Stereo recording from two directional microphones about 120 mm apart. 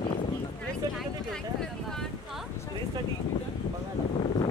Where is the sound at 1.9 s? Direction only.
5° left (ahead or behind).